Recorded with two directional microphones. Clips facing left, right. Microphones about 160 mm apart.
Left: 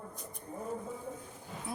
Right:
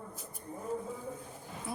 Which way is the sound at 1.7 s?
Centre (ahead or behind).